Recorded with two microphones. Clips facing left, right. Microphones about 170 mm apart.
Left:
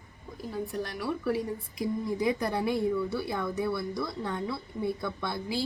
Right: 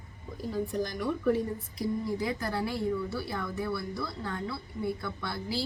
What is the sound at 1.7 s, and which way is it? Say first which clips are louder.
A woman's voice: left 1 dB; 15° left (ahead or behind).